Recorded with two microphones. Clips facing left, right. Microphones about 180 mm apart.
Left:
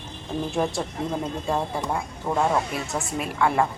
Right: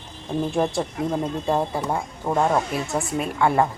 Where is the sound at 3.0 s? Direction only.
Centre (ahead or behind).